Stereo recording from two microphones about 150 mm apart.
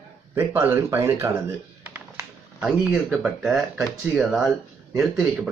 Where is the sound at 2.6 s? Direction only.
5° right (ahead or behind).